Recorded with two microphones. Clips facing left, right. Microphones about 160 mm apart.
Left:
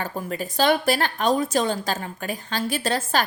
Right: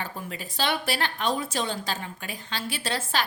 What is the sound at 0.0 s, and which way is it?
A woman's voice, 45° left (ahead or behind).